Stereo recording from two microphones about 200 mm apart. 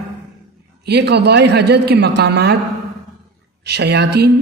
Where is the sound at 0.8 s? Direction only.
55° right (ahead or behind).